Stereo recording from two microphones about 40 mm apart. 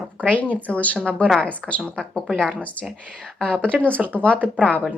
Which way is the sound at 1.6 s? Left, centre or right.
Centre.